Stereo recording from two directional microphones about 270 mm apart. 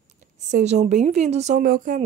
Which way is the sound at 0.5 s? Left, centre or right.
Right.